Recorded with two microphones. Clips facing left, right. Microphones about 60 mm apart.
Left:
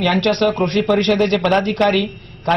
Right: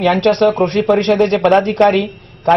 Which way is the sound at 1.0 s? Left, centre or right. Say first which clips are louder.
Right 3 dB; right.